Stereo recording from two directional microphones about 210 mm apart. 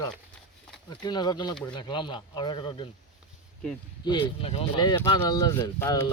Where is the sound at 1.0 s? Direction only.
20° left (ahead or behind).